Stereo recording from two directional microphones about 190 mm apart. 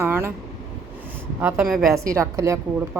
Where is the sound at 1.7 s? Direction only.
Centre (ahead or behind).